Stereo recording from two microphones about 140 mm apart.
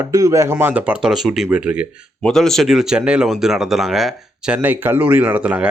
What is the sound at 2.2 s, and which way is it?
Speech, 5° left (ahead or behind).